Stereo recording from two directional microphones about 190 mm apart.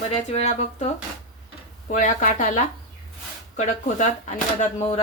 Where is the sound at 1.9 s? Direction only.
40° left (ahead or behind).